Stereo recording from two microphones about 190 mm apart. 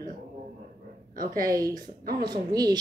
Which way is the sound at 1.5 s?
20° right (ahead or behind).